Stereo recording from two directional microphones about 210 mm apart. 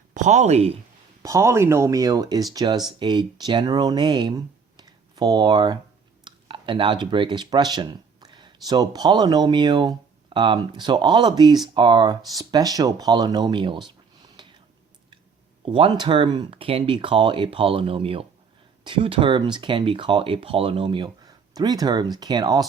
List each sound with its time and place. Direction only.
0.1 s speech: 35° right (ahead or behind)
1.2 s speech: 15° right (ahead or behind)
14.4 s a sound: 20° right (ahead or behind)
15.6 s speech: 25° right (ahead or behind)